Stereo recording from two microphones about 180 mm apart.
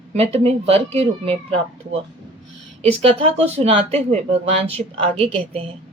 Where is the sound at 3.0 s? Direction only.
35° right (ahead or behind).